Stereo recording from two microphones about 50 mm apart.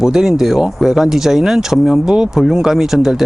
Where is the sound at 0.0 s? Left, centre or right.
Centre.